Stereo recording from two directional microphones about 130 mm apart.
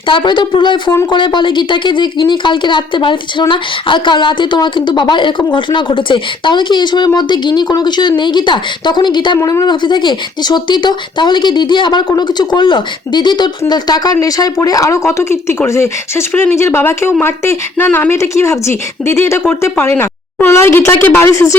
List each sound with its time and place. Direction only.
0.1 s speech: 35° left (ahead or behind)